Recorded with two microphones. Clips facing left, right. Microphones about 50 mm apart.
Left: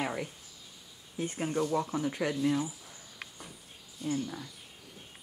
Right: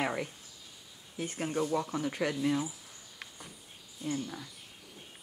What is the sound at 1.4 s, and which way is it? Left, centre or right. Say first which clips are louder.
Speech: left 1 dB; centre.